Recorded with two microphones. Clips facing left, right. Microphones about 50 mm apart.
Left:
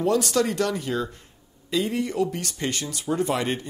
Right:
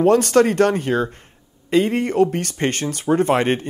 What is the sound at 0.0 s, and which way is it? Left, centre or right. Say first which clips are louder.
Speech: right 8 dB; right.